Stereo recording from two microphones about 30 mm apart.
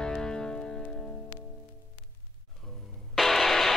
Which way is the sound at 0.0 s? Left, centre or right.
Left.